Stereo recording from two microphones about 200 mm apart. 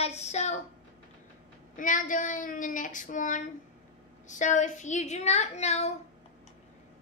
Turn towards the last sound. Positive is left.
turn(degrees=35)  # may be behind; listen again after turning